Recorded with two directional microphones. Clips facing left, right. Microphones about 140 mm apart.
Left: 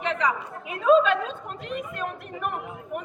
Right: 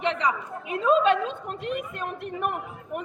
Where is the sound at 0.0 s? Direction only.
30° right (ahead or behind).